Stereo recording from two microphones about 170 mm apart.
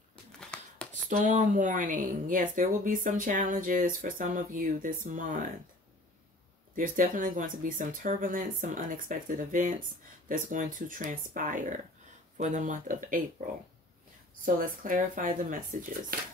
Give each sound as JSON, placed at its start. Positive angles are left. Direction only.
{"t": 0.4, "sound": "a sound", "side_deg": 5}
{"t": 1.2, "sound": "speech", "side_deg": -45}
{"t": 6.7, "sound": "speech", "side_deg": -55}
{"t": 14.4, "sound": "speech", "side_deg": -55}